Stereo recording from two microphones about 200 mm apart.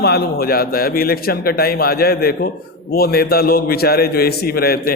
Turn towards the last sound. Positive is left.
turn(degrees=50)  # may be behind; listen again after turning